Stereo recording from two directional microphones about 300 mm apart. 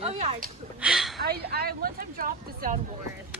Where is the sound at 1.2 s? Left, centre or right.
Right.